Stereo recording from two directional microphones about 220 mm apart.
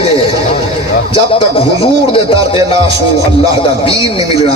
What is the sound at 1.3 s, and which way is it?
A man's voice, 25° left (ahead or behind).